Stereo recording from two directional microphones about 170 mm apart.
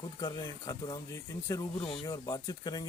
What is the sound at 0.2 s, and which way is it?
Speech, 20° left (ahead or behind).